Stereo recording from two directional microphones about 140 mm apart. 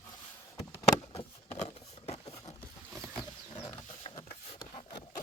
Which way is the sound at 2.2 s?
30° left (ahead or behind).